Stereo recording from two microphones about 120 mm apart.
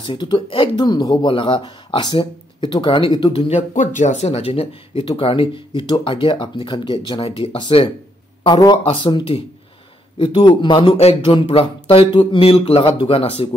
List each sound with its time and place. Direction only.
0.0 s speech: 40° left (ahead or behind)
11.1 s speech: 45° left (ahead or behind)